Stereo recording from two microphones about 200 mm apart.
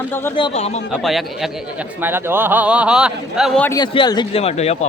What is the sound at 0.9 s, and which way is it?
A man's voice, centre (ahead or behind).